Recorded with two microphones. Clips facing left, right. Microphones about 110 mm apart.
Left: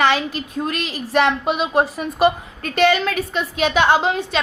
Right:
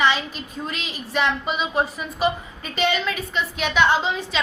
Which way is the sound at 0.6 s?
65° left (ahead or behind).